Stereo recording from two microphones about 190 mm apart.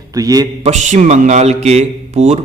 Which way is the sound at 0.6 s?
40° right (ahead or behind).